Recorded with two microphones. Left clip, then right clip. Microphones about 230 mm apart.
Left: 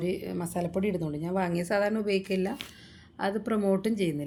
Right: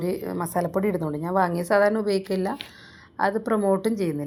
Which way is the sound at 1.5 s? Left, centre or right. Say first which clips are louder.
Right 7 dB; centre.